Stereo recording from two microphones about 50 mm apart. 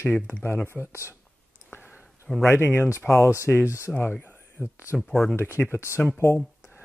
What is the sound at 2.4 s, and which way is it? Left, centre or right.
Speech, left.